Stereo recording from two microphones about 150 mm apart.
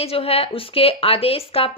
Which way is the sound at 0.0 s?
40° left (ahead or behind).